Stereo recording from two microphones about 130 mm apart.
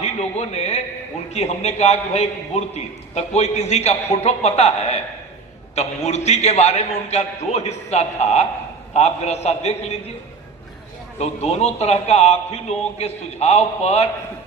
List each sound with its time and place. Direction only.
0.0 s a man's voice: 55° left (ahead or behind)
11.2 s a man's voice: 55° left (ahead or behind)